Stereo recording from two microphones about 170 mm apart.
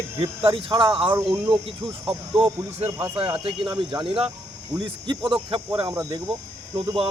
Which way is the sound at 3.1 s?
30° right (ahead or behind).